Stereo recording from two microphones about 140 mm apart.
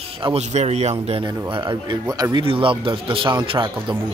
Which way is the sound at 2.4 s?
40° right (ahead or behind).